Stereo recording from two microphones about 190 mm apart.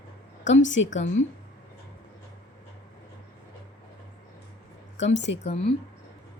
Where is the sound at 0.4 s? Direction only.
75° left (ahead or behind).